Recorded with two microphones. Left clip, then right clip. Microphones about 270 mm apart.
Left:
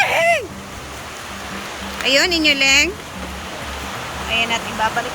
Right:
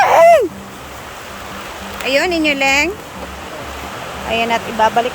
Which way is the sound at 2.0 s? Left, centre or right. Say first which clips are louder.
Even; centre.